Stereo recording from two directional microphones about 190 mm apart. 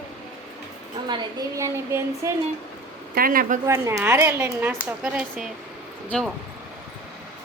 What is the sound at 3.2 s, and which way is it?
Speech, 50° right (ahead or behind).